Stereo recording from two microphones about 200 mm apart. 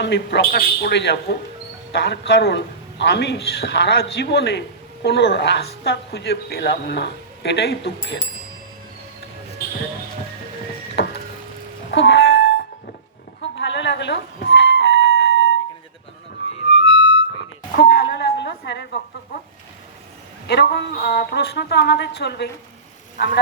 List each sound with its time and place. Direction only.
0.0 s a woman's voice: 60° left (ahead or behind)
11.0 s music: 55° left (ahead or behind)
11.9 s a sound: 60° left (ahead or behind)
13.4 s music: 60° left (ahead or behind)
16.6 s music: 65° left (ahead or behind)
20.5 s a woman's voice: 55° left (ahead or behind)